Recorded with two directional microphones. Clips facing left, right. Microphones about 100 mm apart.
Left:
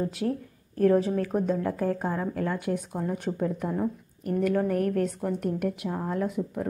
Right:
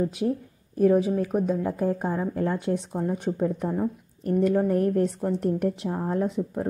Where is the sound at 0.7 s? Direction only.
10° right (ahead or behind).